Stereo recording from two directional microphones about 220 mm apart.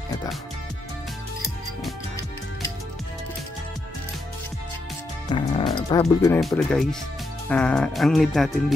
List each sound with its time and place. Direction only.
5.3 s speech: 20° left (ahead or behind)
6.4 s speech: centre (ahead or behind)